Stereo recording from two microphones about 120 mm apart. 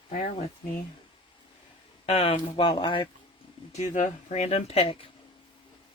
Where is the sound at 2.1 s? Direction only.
55° left (ahead or behind).